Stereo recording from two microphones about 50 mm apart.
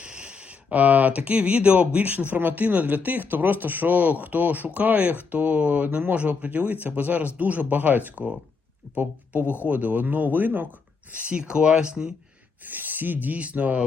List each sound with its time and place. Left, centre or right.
0.0 s speech: right
12.6 s speech: right